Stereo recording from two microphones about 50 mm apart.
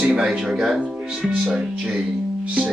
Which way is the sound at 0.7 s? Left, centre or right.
Right.